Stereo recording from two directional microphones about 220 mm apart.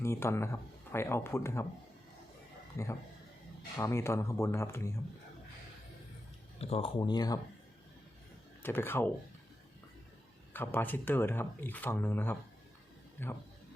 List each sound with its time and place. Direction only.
0.0 s speech: 10° left (ahead or behind)
2.7 s speech: 15° left (ahead or behind)
6.6 s speech: 25° left (ahead or behind)
8.6 s speech: 10° left (ahead or behind)
10.5 s speech: 10° left (ahead or behind)